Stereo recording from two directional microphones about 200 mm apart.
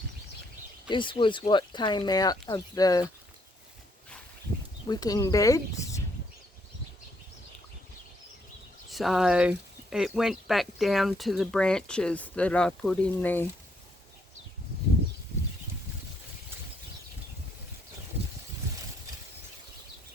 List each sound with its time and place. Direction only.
0.9 s speech: 25° left (ahead or behind)
4.9 s speech: 20° left (ahead or behind)
8.9 s speech: centre (ahead or behind)